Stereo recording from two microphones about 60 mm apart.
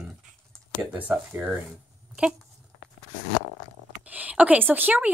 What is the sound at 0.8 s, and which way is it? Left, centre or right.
Speech, right.